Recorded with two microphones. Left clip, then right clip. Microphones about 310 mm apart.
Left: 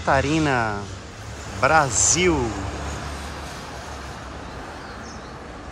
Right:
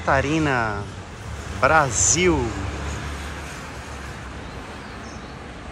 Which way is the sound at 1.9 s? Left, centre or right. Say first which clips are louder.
Even; left.